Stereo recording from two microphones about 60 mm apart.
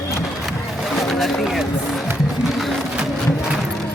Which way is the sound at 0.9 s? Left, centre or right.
Centre.